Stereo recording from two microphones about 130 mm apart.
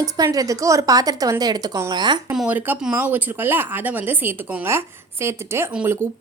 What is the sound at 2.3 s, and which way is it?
Speech, 10° right (ahead or behind).